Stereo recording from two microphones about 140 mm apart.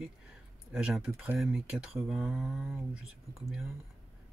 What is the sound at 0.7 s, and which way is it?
Speech, 5° right (ahead or behind).